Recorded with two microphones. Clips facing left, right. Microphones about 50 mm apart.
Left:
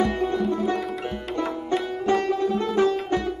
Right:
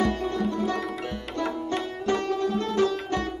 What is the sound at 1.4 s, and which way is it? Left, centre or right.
Sitar, centre.